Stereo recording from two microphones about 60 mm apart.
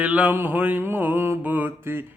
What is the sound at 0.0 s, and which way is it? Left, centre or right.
Mantra, right.